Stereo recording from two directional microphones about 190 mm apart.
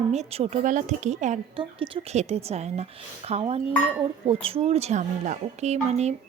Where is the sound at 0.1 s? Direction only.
35° right (ahead or behind).